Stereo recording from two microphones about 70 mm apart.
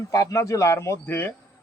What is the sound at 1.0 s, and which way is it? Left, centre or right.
Speech, left.